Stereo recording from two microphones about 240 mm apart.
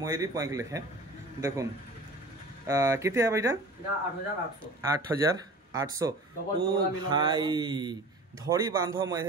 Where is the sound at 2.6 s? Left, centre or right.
Centre.